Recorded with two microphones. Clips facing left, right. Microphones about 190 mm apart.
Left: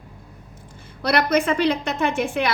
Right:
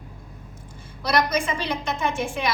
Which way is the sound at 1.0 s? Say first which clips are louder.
Left 4 dB; 60° left (ahead or behind).